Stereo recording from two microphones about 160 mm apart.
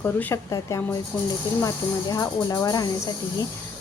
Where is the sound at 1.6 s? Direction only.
20° left (ahead or behind).